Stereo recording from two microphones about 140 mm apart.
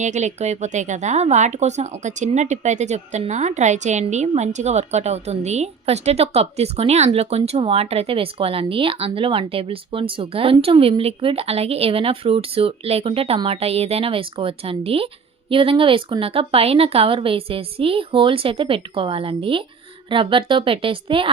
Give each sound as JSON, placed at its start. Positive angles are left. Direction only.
{"t": 0.0, "sound": "speech", "side_deg": -55}